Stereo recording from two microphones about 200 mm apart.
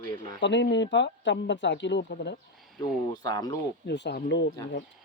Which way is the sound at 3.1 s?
20° left (ahead or behind).